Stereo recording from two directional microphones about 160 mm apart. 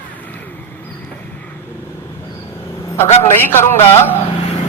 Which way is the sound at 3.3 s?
15° left (ahead or behind).